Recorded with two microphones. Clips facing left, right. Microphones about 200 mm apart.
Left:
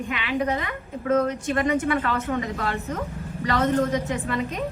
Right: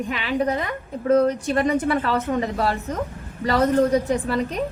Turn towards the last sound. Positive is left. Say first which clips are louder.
# right 5 dB
turn(degrees=-35)  # may be behind; listen again after turning